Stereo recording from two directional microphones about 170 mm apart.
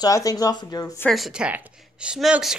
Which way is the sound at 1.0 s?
Centre (ahead or behind).